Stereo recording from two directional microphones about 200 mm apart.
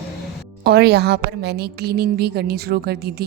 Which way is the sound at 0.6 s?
55° right (ahead or behind).